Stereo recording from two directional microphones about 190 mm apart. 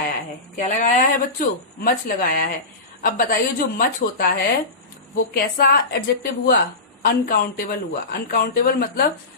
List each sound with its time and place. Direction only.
0.5 s speech: 40° left (ahead or behind)